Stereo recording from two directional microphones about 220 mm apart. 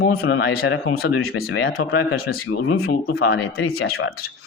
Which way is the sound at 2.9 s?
45° left (ahead or behind).